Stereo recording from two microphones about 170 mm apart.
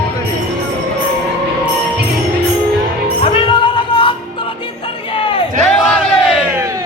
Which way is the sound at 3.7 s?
30° left (ahead or behind).